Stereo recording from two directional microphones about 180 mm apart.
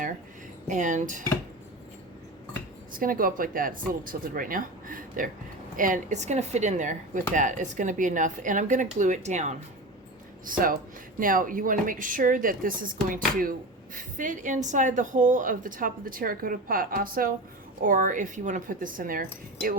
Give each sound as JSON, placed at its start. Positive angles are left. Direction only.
{"t": 0.7, "sound": "speech", "side_deg": -45}
{"t": 3.0, "sound": "speech", "side_deg": -50}
{"t": 10.4, "sound": "speech", "side_deg": -50}